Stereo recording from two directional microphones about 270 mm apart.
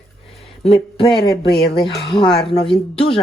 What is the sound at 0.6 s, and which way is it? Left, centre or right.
Speech, centre.